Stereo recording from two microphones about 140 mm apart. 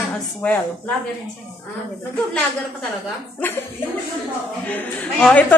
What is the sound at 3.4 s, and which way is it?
Speech, 15° left (ahead or behind).